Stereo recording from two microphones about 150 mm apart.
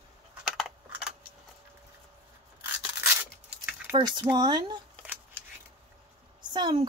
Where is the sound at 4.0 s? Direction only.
30° right (ahead or behind).